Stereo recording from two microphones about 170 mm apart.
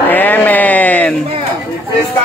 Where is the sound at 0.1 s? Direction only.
10° left (ahead or behind).